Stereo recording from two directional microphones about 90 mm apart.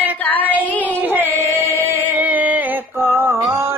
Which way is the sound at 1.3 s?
25° left (ahead or behind).